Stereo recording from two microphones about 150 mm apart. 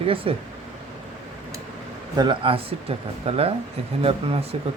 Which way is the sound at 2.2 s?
35° right (ahead or behind).